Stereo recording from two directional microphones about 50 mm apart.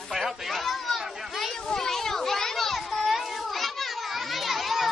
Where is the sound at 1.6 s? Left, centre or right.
Centre.